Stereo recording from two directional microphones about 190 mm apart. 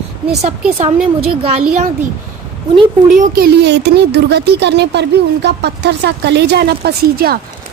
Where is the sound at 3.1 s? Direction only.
40° right (ahead or behind).